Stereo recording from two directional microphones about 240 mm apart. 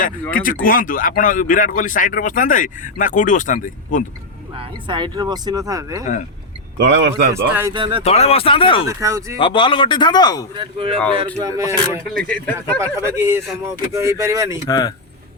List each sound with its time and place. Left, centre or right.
0.0 s speech: left
4.5 s speech: right
6.7 s speech: right
7.3 s speech: centre
8.0 s speech: left
8.9 s speech: centre
9.4 s speech: left
10.6 s speech: right
12.1 s speech: centre
12.8 s speech: centre
14.7 s speech: centre